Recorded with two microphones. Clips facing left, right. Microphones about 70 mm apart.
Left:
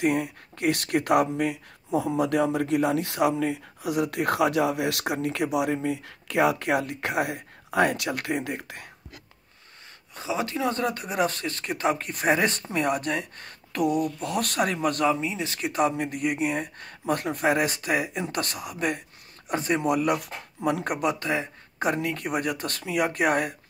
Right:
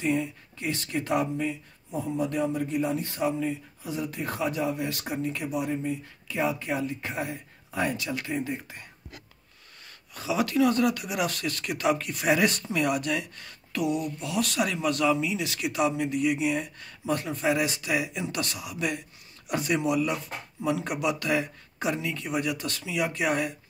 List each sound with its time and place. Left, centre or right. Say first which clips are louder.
0.0 s speech: left 3 dB; left
10.1 s speech: right 3 dB; left
21.8 s speech: left 3 dB; left